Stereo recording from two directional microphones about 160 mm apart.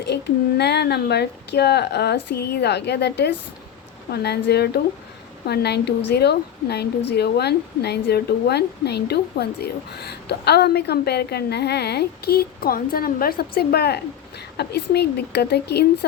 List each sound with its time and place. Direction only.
0.0 s a woman's voice: 90° left